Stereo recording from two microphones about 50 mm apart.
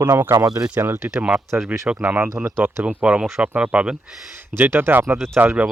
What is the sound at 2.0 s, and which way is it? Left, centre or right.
Speech, right.